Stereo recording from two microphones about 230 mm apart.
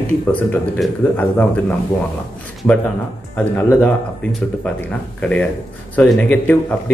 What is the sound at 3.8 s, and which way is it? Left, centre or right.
Speech, centre.